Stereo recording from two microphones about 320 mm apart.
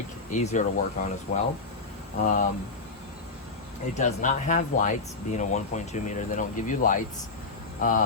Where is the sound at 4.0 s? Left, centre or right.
Left.